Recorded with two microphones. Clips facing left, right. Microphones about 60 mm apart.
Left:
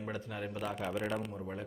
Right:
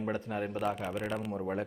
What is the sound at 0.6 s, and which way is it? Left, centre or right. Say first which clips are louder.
Speech: even; centre.